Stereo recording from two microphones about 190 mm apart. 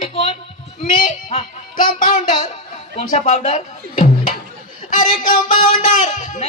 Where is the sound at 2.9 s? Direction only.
35° left (ahead or behind).